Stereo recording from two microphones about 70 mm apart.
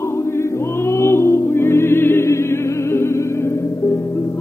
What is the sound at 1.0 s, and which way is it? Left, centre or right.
Music, left.